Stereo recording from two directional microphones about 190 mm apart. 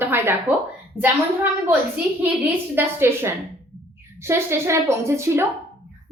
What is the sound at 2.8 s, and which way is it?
A woman's voice, 10° right (ahead or behind).